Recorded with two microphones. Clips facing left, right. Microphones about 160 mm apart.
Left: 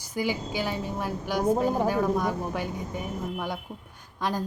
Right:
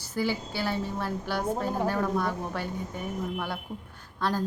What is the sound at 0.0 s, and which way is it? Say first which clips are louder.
A woman's voice: even; 15° left (ahead or behind).